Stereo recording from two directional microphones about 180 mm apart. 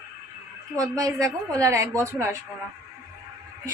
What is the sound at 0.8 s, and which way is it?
A woman's voice, 20° right (ahead or behind).